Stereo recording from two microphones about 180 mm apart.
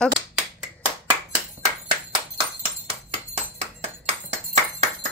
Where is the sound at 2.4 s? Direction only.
35° right (ahead or behind).